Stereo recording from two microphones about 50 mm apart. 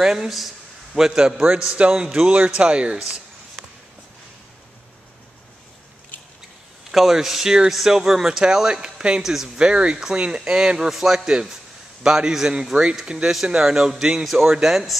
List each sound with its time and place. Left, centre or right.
0.0 s a man's voice: centre
1.8 s a man's voice: centre
6.9 s a man's voice: centre
9.6 s a man's voice: centre